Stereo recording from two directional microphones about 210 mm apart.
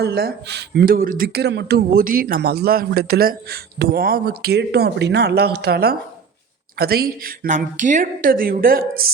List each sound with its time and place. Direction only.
0.0 s speech: 50° right (ahead or behind)